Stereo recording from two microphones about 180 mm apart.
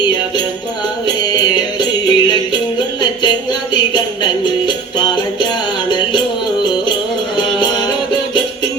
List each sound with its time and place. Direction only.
1.0 s music: 25° left (ahead or behind)
7.3 s music: 25° left (ahead or behind)